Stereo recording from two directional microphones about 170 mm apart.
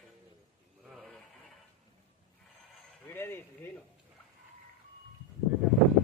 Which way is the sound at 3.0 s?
10° left (ahead or behind).